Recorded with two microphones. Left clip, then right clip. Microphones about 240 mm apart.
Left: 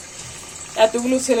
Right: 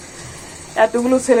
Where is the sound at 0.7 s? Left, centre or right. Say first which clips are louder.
Right 2 dB; centre.